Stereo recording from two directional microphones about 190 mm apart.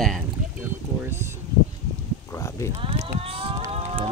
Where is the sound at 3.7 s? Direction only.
30° right (ahead or behind).